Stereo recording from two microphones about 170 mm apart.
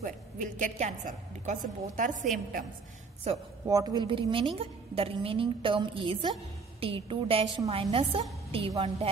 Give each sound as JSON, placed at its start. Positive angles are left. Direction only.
{"t": 0.0, "sound": "a woman's voice", "side_deg": -50}
{"t": 3.3, "sound": "a woman's voice", "side_deg": -35}
{"t": 3.6, "sound": "a woman's voice", "side_deg": -25}